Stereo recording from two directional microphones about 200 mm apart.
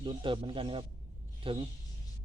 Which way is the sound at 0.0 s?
25° right (ahead or behind).